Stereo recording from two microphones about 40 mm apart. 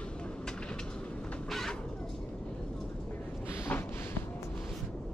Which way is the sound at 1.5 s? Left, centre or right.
Centre.